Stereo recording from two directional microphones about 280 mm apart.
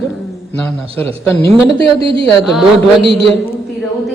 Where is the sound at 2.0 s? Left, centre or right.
Left.